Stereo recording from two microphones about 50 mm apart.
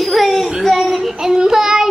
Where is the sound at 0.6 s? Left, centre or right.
Centre.